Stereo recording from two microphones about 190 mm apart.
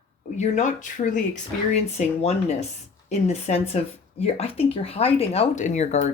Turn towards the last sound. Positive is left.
turn(degrees=35)  # may be behind; listen again after turning